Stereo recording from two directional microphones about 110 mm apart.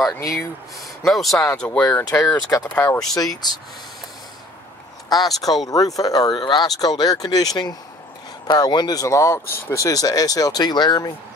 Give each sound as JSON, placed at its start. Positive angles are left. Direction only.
{"t": 1.0, "sound": "speech", "side_deg": 0}
{"t": 1.6, "sound": "speech", "side_deg": 10}
{"t": 3.2, "sound": "speech", "side_deg": 35}
{"t": 5.1, "sound": "speech", "side_deg": 35}